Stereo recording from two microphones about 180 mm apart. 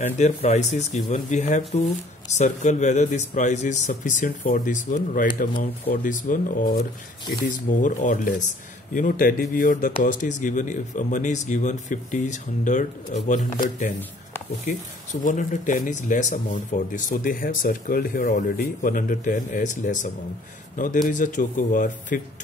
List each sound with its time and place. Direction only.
0.0 s speech: 40° left (ahead or behind)
15.2 s speech: 45° left (ahead or behind)